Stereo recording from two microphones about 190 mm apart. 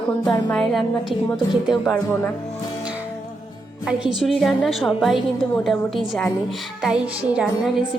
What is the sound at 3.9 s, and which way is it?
A woman's voice, 5° right (ahead or behind).